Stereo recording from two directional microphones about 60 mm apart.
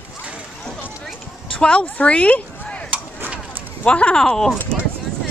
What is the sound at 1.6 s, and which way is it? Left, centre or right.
Speech, centre.